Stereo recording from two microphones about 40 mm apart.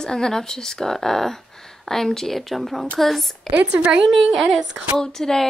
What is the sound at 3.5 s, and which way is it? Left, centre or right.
Speech, right.